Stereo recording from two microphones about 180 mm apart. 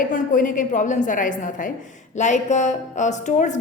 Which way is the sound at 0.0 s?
50° left (ahead or behind).